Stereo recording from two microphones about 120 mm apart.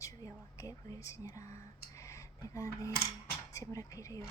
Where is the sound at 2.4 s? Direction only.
30° left (ahead or behind).